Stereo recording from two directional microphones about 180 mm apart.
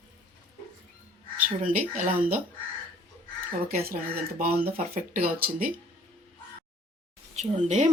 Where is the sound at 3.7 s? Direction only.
55° right (ahead or behind).